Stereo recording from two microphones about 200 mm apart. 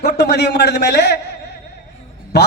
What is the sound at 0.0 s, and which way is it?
A man's voice, 55° left (ahead or behind).